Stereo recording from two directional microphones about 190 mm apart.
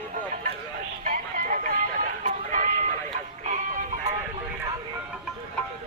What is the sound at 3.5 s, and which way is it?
Music, 35° right (ahead or behind).